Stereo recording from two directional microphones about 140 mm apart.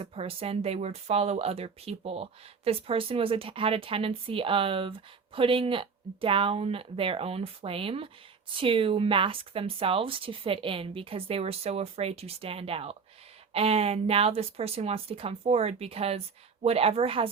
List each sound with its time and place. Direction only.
0.0 s speech: 40° right (ahead or behind)